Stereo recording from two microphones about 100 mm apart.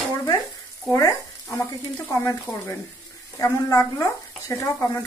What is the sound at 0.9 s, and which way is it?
Frying, 35° left (ahead or behind).